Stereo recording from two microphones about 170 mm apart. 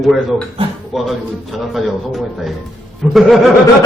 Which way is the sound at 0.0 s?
Centre (ahead or behind).